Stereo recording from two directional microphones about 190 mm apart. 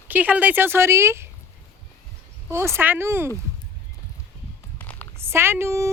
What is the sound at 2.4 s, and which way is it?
Speech, 10° right (ahead or behind).